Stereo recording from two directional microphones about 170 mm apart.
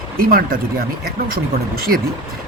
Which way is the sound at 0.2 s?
60° right (ahead or behind).